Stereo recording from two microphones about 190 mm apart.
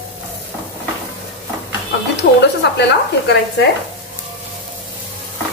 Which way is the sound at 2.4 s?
65° left (ahead or behind).